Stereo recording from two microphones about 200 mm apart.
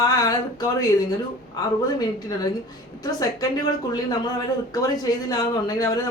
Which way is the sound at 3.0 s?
20° left (ahead or behind).